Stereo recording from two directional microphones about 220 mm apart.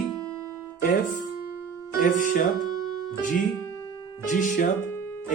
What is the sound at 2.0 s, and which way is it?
Speech, 40° left (ahead or behind).